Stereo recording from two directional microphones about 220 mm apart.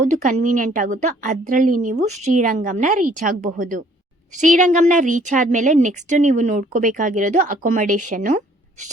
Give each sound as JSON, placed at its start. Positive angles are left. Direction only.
{"t": 0.0, "sound": "speech", "side_deg": -35}